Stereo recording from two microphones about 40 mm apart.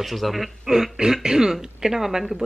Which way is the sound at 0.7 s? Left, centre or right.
Centre.